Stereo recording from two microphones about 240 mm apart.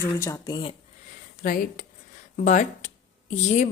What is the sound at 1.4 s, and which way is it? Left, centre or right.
A woman's voice, left.